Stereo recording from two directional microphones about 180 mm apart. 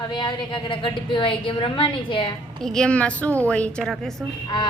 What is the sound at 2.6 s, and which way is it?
A woman's voice, 5° left (ahead or behind).